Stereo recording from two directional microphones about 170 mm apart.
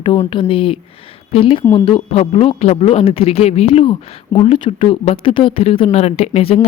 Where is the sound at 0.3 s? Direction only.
30° left (ahead or behind).